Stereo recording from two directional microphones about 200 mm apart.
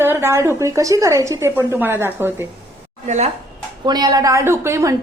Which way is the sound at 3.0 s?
35° right (ahead or behind).